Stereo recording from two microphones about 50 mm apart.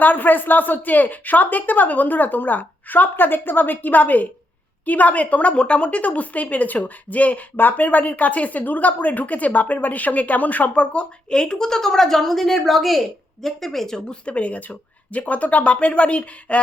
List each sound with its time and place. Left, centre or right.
0.0 s a woman's voice: left
11.3 s a woman's voice: centre
14.1 s speech: left